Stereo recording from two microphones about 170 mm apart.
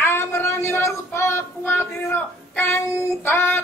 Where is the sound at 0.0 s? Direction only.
15° left (ahead or behind).